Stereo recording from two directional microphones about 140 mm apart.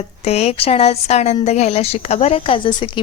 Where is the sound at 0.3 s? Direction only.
50° left (ahead or behind).